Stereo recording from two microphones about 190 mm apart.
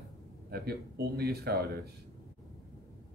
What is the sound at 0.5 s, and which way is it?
Speech, 55° right (ahead or behind).